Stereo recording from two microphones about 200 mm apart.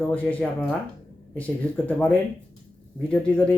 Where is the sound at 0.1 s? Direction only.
5° left (ahead or behind).